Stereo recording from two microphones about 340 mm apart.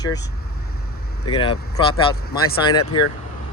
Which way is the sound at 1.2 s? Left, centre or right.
Centre.